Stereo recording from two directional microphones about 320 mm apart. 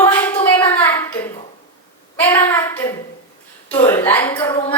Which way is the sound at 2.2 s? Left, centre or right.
Centre.